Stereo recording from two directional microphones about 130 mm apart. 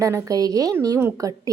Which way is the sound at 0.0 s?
25° right (ahead or behind).